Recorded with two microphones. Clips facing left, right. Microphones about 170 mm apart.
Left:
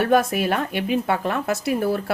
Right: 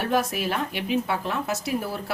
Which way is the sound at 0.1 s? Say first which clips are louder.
Left 6 dB; 55° left (ahead or behind).